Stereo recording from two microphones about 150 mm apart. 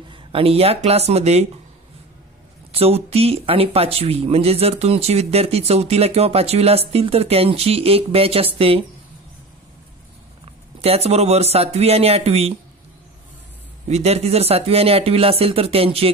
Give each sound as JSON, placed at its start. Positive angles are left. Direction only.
{"t": 0.1, "sound": "speech", "side_deg": -35}
{"t": 2.7, "sound": "speech", "side_deg": -40}
{"t": 10.8, "sound": "a man's voice", "side_deg": -45}
{"t": 13.8, "sound": "speech", "side_deg": -45}